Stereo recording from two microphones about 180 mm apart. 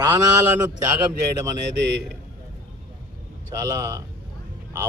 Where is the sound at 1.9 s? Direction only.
75° right (ahead or behind).